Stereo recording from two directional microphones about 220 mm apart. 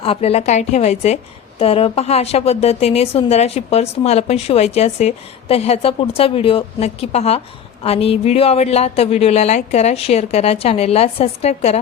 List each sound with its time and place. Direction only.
0.0 s a woman's voice: 25° left (ahead or behind)